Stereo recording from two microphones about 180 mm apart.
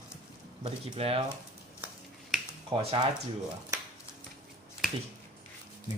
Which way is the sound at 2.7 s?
30° right (ahead or behind).